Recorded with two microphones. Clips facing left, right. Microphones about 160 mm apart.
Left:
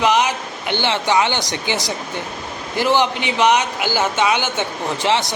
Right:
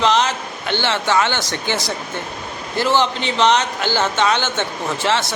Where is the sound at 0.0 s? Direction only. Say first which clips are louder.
Even; 10° left (ahead or behind).